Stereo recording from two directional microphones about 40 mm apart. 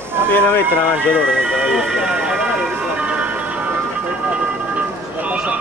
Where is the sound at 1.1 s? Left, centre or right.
Left.